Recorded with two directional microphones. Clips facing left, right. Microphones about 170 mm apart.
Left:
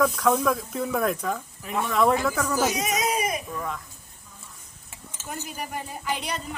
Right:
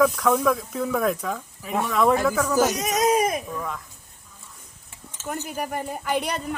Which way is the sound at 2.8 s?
45° right (ahead or behind).